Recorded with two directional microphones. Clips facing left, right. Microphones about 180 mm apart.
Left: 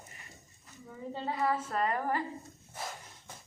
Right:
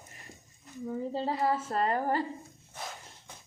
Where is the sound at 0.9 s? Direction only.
35° right (ahead or behind).